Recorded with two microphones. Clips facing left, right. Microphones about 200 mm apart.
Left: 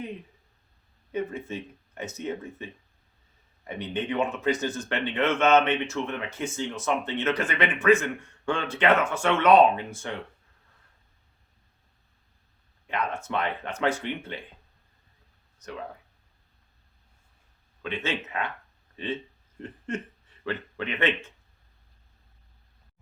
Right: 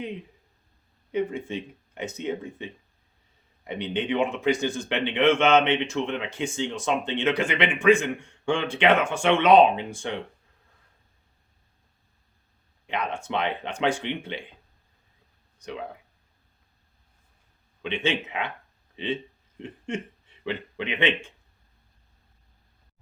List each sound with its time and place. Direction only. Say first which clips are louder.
1.1 s a man's voice: right 3 dB; 15° right (ahead or behind)
12.9 s a man's voice: right 1 dB; 15° right (ahead or behind)
15.5 s speech: right 3 dB; 15° right (ahead or behind)
18.0 s a man's voice: right 4 dB; 15° right (ahead or behind)